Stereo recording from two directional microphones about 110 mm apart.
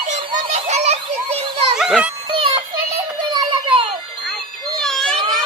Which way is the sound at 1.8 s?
5° right (ahead or behind).